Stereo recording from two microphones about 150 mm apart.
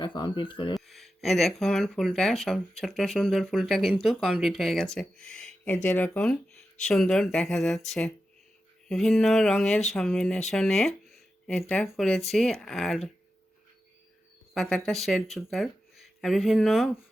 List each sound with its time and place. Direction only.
0.0 s speech: 30° left (ahead or behind)
0.7 s speech: centre (ahead or behind)
10.5 s a sound: centre (ahead or behind)
11.7 s speech: centre (ahead or behind)
14.5 s speech: 5° left (ahead or behind)